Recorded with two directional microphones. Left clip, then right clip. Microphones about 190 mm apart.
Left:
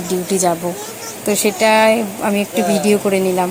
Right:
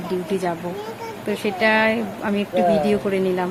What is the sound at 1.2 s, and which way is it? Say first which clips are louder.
A woman's voice: left 6 dB; 25° left (ahead or behind).